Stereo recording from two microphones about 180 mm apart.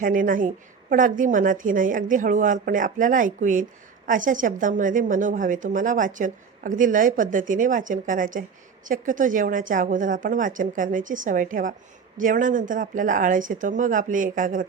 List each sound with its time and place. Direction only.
0.0 s a woman's voice: 50° right (ahead or behind)